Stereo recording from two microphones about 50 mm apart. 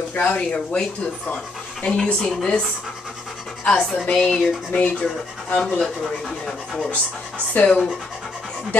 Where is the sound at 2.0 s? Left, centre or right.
Centre.